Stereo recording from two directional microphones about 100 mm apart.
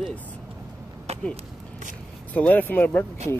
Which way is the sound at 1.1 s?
90° right.